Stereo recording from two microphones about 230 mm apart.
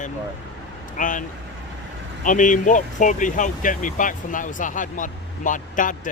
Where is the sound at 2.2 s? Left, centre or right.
Left.